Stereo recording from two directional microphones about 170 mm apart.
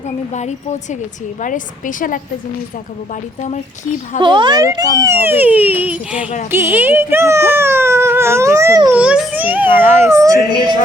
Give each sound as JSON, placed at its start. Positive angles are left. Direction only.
{"t": 0.3, "sound": "a woman's voice", "side_deg": 45}
{"t": 4.2, "sound": "speech", "side_deg": -30}